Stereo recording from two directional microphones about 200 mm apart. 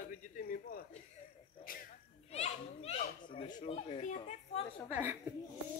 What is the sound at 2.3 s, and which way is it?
A child's voice, 30° left (ahead or behind).